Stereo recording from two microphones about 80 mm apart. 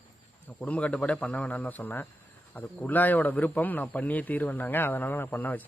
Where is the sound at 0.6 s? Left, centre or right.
Centre.